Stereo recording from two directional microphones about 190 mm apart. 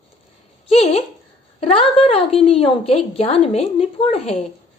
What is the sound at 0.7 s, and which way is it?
A woman's voice, 35° left (ahead or behind).